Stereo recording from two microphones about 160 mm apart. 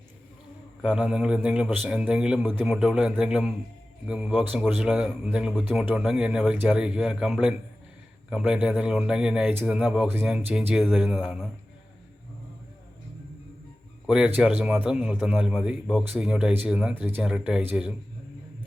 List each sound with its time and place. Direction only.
0.8 s a man's voice: 5° right (ahead or behind)
14.1 s a man's voice: 10° right (ahead or behind)